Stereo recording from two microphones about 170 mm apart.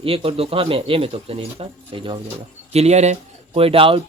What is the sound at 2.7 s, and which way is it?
Speech, 40° right (ahead or behind).